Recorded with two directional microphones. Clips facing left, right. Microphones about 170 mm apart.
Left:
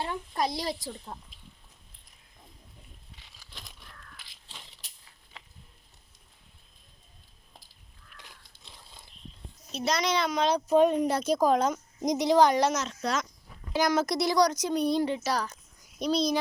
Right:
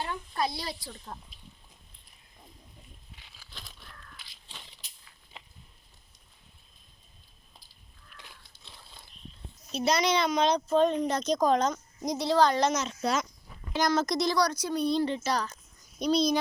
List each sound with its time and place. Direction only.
0.0 s a woman's voice: 20° left (ahead or behind)
0.7 s a woman's voice: 40° left (ahead or behind)
9.7 s speech: centre (ahead or behind)
12.7 s speech: centre (ahead or behind)
13.7 s speech: 5° left (ahead or behind)